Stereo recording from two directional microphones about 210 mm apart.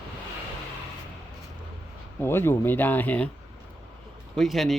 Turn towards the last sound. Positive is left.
turn(degrees=0)  # may be behind; listen again after turning